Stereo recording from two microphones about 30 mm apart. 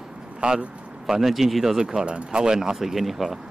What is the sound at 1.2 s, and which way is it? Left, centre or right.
Speech, centre.